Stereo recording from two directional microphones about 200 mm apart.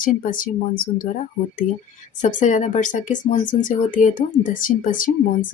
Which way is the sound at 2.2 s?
40° left (ahead or behind).